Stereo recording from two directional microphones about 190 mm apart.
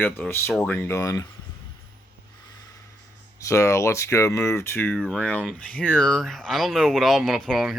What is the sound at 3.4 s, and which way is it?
Speech, 15° left (ahead or behind).